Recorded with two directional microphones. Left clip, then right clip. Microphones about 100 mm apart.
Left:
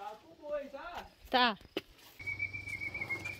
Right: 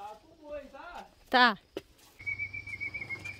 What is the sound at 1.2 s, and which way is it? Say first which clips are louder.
Speech: right 6 dB; 75° right (ahead or behind).